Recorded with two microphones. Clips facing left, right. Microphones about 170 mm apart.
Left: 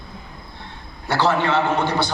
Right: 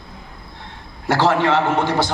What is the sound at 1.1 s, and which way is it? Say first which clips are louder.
Speech: right 3 dB; 90° right.